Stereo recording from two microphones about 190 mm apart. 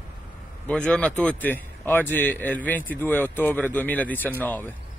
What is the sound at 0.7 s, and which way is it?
A man's voice, 5° left (ahead or behind).